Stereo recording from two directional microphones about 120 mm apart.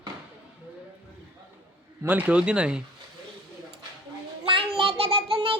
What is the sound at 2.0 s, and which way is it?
Speech, 15° right (ahead or behind).